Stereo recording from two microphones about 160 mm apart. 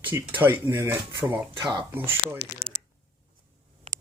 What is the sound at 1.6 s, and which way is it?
Speech, 30° right (ahead or behind).